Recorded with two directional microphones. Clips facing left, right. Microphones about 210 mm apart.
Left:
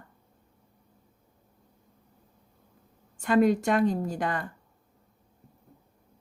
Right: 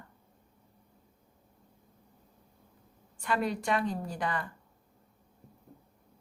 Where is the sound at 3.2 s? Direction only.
45° left (ahead or behind).